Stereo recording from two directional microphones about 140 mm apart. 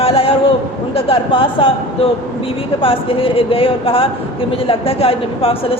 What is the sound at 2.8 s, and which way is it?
A woman's voice, 40° left (ahead or behind).